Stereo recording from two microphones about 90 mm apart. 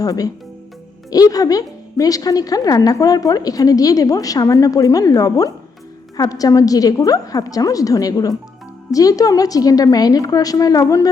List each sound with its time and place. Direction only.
0.0 s a woman's voice: 40° left (ahead or behind)